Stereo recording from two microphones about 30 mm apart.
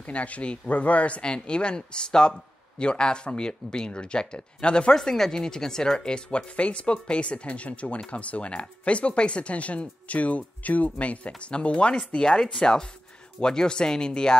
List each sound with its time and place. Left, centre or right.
0.0 s speech: left
1.2 s speech: left
4.9 s speech: centre